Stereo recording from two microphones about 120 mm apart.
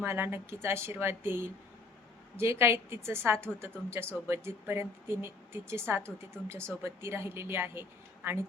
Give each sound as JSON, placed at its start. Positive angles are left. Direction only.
{"t": 0.0, "sound": "speech", "side_deg": -20}